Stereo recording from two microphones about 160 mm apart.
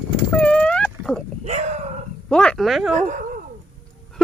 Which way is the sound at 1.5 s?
45° right (ahead or behind).